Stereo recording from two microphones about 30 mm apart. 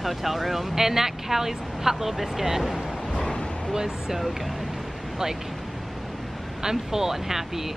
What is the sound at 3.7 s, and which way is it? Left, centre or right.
Speech, centre.